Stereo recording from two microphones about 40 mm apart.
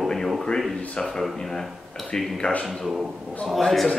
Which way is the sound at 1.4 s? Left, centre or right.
Centre.